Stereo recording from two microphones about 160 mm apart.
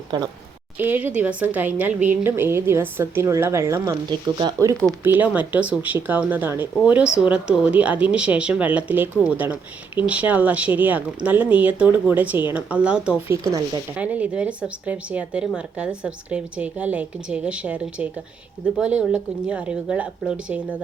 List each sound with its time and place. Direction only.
0.8 s speech: 10° right (ahead or behind)
5.0 s speech: 10° right (ahead or behind)